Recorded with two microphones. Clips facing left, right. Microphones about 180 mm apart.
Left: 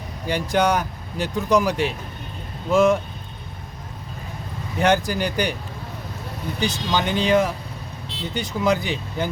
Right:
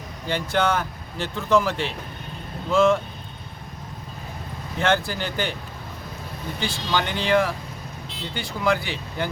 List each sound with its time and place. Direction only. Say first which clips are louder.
0.3 s speech: left 3 dB; 15° left (ahead or behind)
4.8 s speech: left 3 dB; 15° left (ahead or behind)
6.6 s speech: left 2 dB; 20° left (ahead or behind)